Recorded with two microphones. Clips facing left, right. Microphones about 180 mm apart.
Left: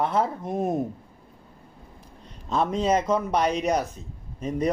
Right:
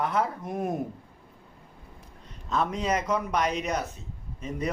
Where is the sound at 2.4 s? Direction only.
30° left (ahead or behind).